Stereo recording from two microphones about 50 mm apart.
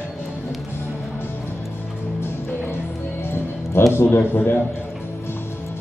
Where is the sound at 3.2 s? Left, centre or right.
Left.